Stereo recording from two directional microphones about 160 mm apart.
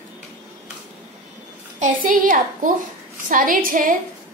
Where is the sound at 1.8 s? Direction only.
55° right (ahead or behind).